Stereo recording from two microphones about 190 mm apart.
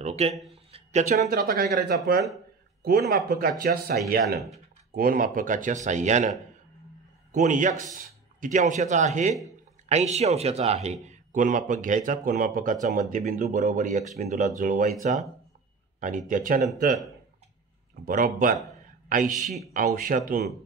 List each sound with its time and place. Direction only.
0.0 s a sound: 35° right (ahead or behind)
1.3 s speech: 55° right (ahead or behind)
7.3 s a man's voice: 40° right (ahead or behind)
18.0 s speech: 45° right (ahead or behind)